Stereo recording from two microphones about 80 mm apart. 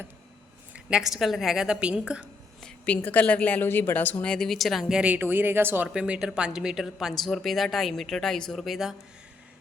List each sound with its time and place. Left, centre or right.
0.7 s a woman's voice: centre
2.6 s speech: centre
4.3 s speech: centre
5.2 s speech: right
5.9 s speech: centre